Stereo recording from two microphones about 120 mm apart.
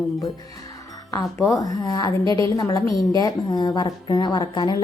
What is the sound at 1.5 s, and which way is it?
Speech, 30° left (ahead or behind).